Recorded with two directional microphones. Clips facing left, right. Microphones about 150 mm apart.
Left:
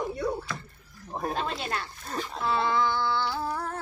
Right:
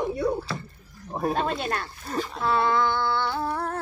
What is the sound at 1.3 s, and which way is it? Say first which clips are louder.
Speech: right 5 dB; 55° right (ahead or behind).